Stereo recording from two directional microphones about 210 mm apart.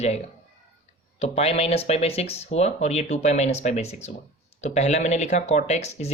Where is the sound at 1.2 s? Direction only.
30° left (ahead or behind).